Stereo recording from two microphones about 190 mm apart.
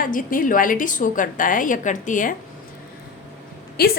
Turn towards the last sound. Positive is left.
turn(degrees=55)  # may be behind; listen again after turning